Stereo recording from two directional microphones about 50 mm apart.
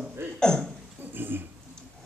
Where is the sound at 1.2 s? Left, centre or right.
Right.